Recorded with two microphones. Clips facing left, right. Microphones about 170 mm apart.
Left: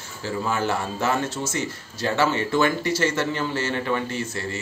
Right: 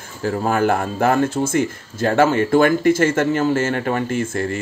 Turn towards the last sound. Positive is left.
turn(degrees=-50)  # may be behind; listen again after turning